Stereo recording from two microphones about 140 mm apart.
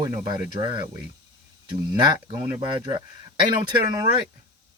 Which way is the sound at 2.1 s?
30° right (ahead or behind).